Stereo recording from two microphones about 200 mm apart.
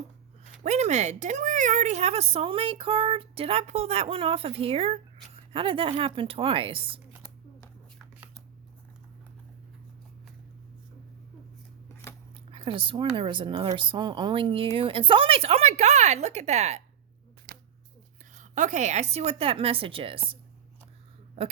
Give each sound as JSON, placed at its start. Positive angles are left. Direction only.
{"t": 0.6, "sound": "speech", "side_deg": -35}
{"t": 12.5, "sound": "speech", "side_deg": -25}
{"t": 18.3, "sound": "speech", "side_deg": -35}